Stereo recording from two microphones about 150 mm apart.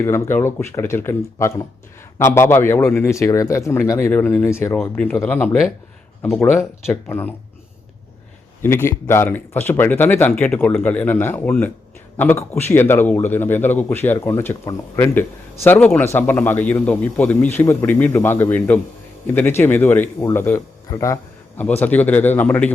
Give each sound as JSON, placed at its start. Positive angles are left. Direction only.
{"t": 0.0, "sound": "a man's voice", "side_deg": 20}
{"t": 8.6, "sound": "a man's voice", "side_deg": 15}